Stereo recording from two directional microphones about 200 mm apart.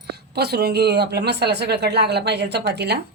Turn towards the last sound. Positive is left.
turn(degrees=-55)  # may be behind; listen again after turning